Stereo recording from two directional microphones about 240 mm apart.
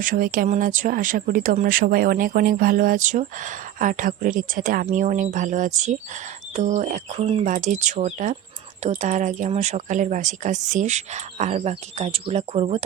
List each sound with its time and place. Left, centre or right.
0.0 s speech: right